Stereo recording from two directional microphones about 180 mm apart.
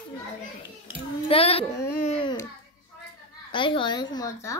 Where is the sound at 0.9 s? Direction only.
30° left (ahead or behind).